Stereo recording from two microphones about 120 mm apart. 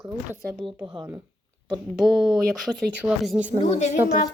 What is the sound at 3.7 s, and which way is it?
Speech, 75° left (ahead or behind).